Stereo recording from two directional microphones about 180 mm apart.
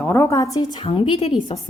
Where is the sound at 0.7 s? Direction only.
30° left (ahead or behind).